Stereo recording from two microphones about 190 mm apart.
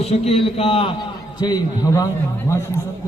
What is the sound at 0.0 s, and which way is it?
A man's voice, 35° left (ahead or behind).